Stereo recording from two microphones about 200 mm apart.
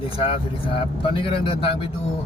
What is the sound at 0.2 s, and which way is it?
Speech, 25° left (ahead or behind).